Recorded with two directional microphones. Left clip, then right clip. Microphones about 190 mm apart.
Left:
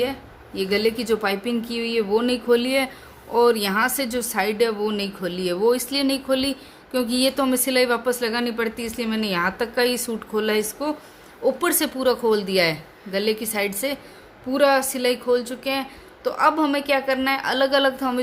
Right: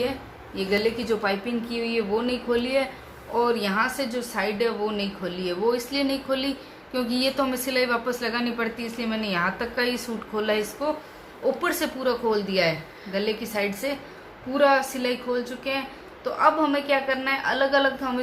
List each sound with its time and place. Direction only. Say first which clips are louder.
0.5 s a woman's voice: left 3 dB; 65° left (ahead or behind)